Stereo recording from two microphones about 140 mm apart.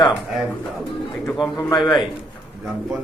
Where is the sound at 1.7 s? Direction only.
30° left (ahead or behind).